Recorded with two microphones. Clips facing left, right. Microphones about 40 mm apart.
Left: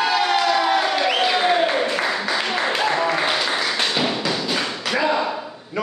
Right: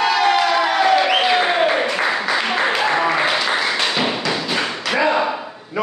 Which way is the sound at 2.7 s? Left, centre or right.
Centre.